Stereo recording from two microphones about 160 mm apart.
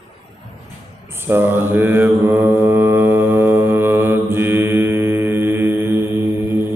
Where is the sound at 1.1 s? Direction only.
15° right (ahead or behind).